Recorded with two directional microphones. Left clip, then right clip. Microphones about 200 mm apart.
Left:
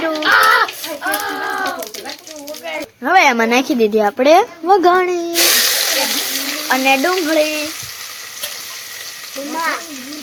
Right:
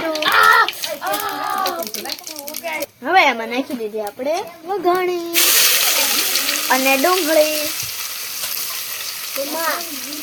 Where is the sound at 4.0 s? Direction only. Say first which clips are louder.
Left 11 dB; 50° left (ahead or behind).